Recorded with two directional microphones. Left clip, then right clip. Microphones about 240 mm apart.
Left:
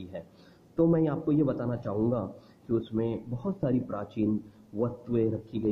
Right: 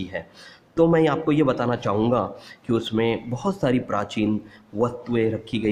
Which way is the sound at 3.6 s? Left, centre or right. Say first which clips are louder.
Right 8 dB; right.